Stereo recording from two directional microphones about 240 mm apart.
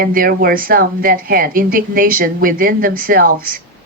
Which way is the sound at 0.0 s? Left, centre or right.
Right.